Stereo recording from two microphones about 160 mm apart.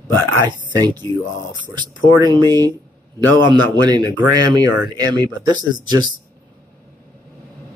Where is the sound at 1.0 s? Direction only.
20° left (ahead or behind).